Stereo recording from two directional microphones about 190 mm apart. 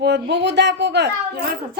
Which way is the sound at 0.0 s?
65° right (ahead or behind).